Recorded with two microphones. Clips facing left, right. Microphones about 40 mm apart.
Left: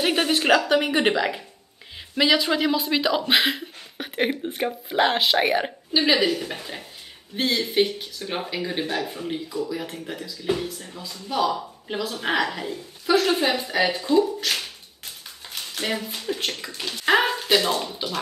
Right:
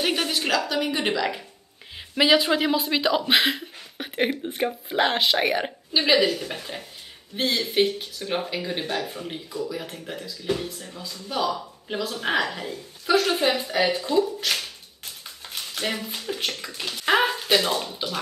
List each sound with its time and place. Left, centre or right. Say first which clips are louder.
0.1 s speech: left 5 dB; left
2.3 s speech: right 1 dB; centre
10.4 s a woman's voice: left 2 dB; centre